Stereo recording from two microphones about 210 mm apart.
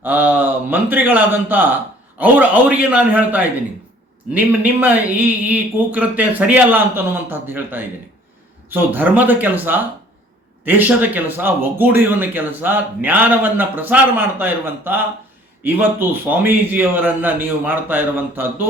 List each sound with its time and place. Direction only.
0.0 s speech: 10° right (ahead or behind)